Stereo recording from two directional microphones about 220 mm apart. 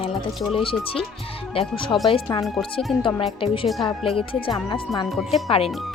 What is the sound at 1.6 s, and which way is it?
Speech, 25° left (ahead or behind).